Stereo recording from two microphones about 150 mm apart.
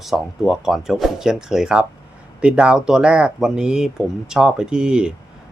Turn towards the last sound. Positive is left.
turn(degrees=-5)  # may be behind; listen again after turning